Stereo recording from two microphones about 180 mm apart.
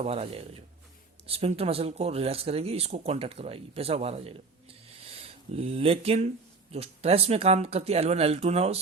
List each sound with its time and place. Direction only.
0.0 s speech: 35° right (ahead or behind)